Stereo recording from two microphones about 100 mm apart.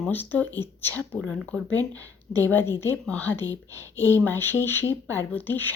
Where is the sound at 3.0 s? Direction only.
15° left (ahead or behind).